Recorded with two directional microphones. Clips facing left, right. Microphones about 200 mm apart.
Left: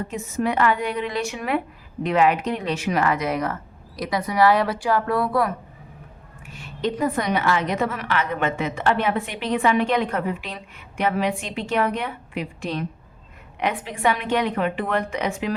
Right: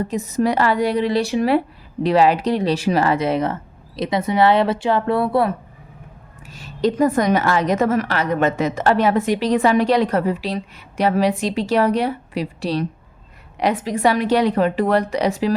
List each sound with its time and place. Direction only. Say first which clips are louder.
0.0 s a woman's voice: right 5 dB; 40° right (ahead or behind)
6.4 s a woman's voice: right 6 dB; 40° right (ahead or behind)